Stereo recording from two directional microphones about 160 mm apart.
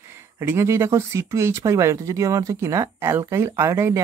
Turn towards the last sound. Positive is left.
turn(degrees=-15)  # may be behind; listen again after turning